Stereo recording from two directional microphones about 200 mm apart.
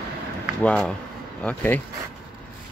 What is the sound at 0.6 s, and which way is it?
Speech, 5° left (ahead or behind).